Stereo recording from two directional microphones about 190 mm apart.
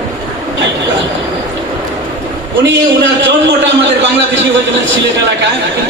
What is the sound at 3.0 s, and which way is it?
A man's voice, 70° right (ahead or behind).